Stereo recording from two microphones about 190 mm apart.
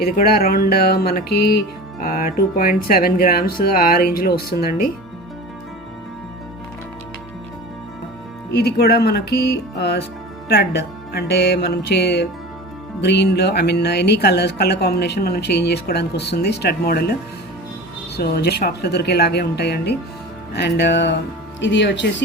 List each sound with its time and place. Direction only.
0.0 s speech: 55° left (ahead or behind)
8.5 s speech: 55° left (ahead or behind)
18.2 s speech: 55° left (ahead or behind)